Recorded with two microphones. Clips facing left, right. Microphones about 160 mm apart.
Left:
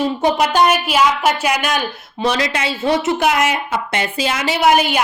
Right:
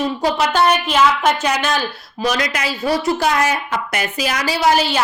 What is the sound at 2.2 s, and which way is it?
A woman's voice, 30° left (ahead or behind).